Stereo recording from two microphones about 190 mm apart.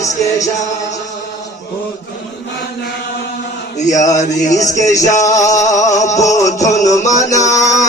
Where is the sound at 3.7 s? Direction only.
40° left (ahead or behind).